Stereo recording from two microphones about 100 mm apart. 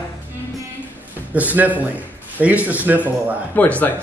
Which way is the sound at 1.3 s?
15° right (ahead or behind).